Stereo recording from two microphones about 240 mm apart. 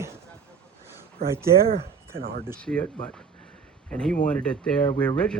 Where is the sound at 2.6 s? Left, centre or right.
Centre.